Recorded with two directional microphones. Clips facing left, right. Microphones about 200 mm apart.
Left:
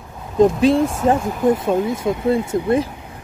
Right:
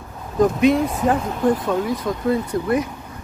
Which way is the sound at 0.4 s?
30° left (ahead or behind).